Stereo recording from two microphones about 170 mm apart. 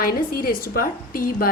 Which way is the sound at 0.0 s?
60° left (ahead or behind).